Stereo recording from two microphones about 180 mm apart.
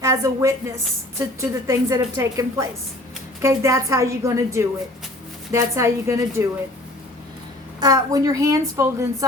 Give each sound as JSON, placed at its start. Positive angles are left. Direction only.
{"t": 0.0, "sound": "a woman's voice", "side_deg": -20}
{"t": 7.8, "sound": "a woman's voice", "side_deg": -20}